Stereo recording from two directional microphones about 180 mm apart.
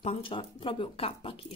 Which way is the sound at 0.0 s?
30° left (ahead or behind).